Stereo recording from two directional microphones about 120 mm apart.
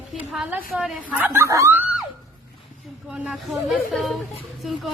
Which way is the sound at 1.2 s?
20° right (ahead or behind).